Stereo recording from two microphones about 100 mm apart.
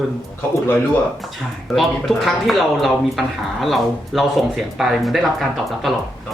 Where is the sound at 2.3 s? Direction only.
Centre (ahead or behind).